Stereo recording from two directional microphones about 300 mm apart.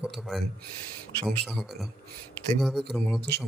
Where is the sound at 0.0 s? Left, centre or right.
Centre.